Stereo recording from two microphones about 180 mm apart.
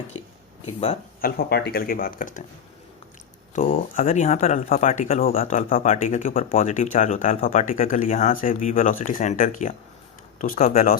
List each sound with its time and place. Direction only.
1.2 s speech: 60° left (ahead or behind)
3.5 s speech: 50° left (ahead or behind)
4.0 s speech: 40° left (ahead or behind)
5.2 s speech: 50° left (ahead or behind)